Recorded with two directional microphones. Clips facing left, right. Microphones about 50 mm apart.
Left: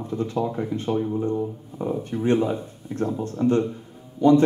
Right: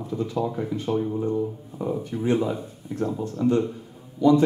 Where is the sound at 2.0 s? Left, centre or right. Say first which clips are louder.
Left 3 dB; left.